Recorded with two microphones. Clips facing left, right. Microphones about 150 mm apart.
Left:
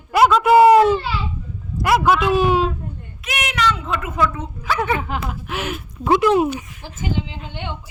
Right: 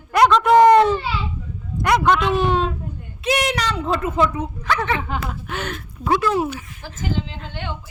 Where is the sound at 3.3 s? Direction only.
35° right (ahead or behind).